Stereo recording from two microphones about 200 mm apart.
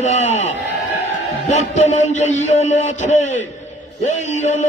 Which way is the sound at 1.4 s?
35° left (ahead or behind).